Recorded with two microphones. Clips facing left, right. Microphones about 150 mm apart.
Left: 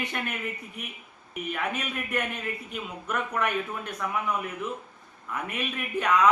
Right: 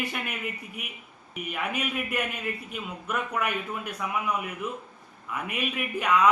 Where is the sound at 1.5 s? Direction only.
10° right (ahead or behind).